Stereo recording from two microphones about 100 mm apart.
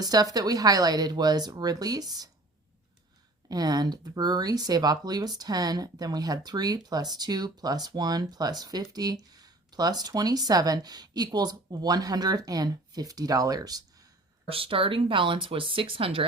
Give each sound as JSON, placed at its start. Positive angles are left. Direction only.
{"t": 0.0, "sound": "speech", "side_deg": -40}
{"t": 3.5, "sound": "speech", "side_deg": -40}
{"t": 14.4, "sound": "speech", "side_deg": -65}